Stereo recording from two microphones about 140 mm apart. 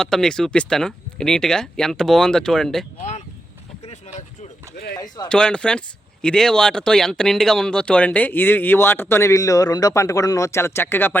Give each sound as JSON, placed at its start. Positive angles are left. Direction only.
{"t": 0.0, "sound": "speech", "side_deg": 5}
{"t": 3.0, "sound": "a sound", "side_deg": 55}
{"t": 4.9, "sound": "speech", "side_deg": 30}
{"t": 5.3, "sound": "speech", "side_deg": 5}